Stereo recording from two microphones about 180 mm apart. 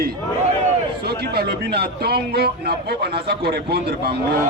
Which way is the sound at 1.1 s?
65° right (ahead or behind).